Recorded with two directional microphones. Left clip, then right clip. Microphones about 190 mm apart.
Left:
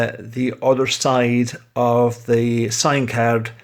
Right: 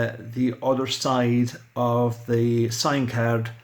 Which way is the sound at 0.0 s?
25° left (ahead or behind).